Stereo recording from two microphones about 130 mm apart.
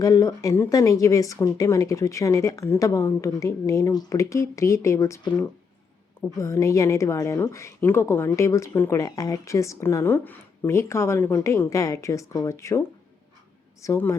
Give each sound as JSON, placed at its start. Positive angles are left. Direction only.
{"t": 0.0, "sound": "speech", "side_deg": 25}
{"t": 6.4, "sound": "speech", "side_deg": 25}
{"t": 13.8, "sound": "speech", "side_deg": 20}